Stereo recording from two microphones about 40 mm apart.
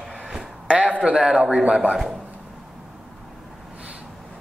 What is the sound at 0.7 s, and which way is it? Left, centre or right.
A man's voice, right.